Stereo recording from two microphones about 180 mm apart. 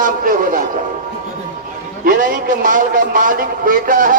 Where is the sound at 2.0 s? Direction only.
50° right (ahead or behind).